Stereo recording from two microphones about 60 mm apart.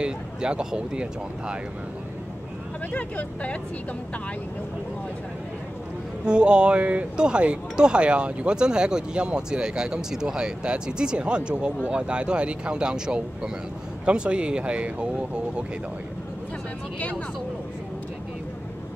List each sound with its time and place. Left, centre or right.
0.0 s speech: centre
2.9 s speech: left
6.2 s speech: centre